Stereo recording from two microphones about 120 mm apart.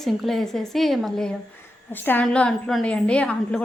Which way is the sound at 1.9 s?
15° left (ahead or behind).